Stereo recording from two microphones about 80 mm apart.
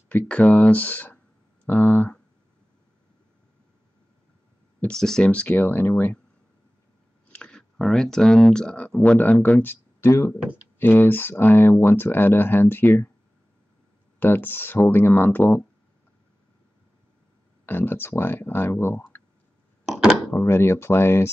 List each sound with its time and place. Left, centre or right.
0.1 s speech: centre
4.8 s speech: centre; by 6.1 s left
7.3 s speech: centre; by 13.1 s left
14.2 s speech: left
17.6 s speech: left
19.9 s a sound: centre
20.3 s speech: left